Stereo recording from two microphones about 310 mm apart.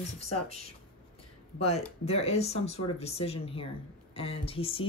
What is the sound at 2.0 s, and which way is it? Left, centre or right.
Speech, centre.